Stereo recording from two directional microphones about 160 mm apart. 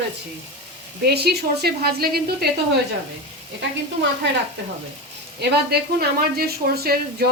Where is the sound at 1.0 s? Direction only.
90° right.